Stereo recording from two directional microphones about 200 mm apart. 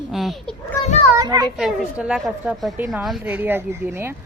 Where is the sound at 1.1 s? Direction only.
20° right (ahead or behind).